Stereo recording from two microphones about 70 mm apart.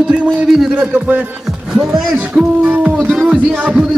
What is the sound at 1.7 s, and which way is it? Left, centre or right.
Speech, centre.